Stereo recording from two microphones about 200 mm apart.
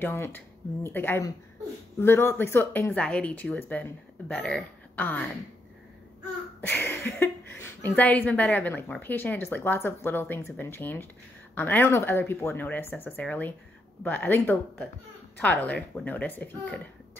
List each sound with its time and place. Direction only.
0.0 s speech: 10° left (ahead or behind)
6.6 s speech: 10° left (ahead or behind)